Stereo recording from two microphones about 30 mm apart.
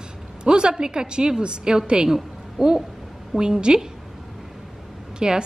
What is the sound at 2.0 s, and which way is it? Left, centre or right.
A woman's voice, centre.